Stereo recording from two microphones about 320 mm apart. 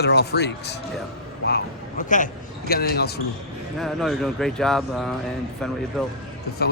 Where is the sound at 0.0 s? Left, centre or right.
Left.